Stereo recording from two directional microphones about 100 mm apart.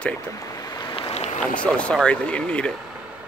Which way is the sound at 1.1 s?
90° left.